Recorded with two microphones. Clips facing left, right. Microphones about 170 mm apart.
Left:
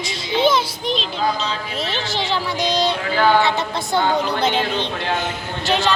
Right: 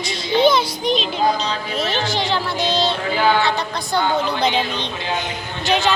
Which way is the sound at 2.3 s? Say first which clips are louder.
Left 3 dB; 10° left (ahead or behind).